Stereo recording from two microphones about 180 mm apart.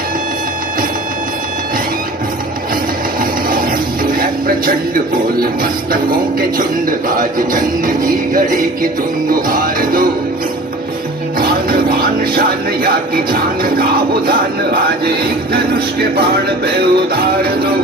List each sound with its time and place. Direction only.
3.2 s music: 50° right (ahead or behind)
11.3 s speech: 55° right (ahead or behind)
14.3 s music: 55° right (ahead or behind)